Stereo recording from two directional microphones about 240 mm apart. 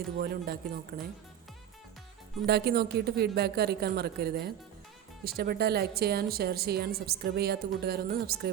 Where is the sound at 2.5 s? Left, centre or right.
Right.